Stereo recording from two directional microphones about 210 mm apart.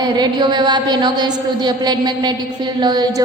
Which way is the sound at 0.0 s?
20° right (ahead or behind).